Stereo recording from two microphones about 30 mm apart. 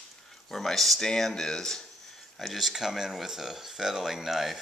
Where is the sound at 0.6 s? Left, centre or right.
Centre.